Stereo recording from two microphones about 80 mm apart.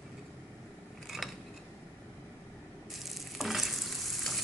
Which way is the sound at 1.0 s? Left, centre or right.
Centre.